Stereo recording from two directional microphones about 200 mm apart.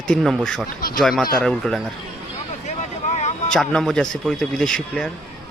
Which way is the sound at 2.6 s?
35° left (ahead or behind).